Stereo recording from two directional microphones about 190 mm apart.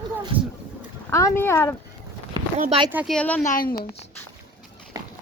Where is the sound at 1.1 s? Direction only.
15° left (ahead or behind).